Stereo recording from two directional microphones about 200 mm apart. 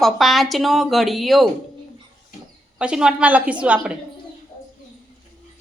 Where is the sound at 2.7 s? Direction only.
5° right (ahead or behind).